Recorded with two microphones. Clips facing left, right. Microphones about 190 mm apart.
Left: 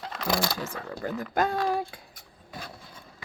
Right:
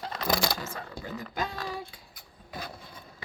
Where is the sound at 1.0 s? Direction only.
55° left (ahead or behind).